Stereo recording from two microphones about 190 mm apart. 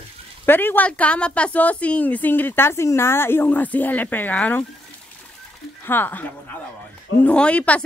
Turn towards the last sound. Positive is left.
turn(degrees=5)  # may be behind; listen again after turning